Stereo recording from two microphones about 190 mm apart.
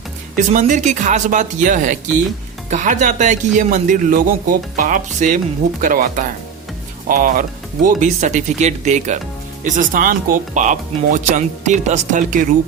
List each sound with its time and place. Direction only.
0.3 s speech: 40° right (ahead or behind)